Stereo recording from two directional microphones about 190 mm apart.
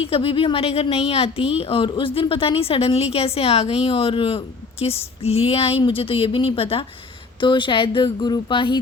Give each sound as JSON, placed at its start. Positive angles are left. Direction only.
{"t": 0.0, "sound": "a woman's voice", "side_deg": 30}